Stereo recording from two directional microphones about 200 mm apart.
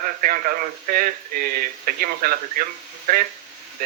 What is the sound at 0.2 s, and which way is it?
Speech, 45° right (ahead or behind).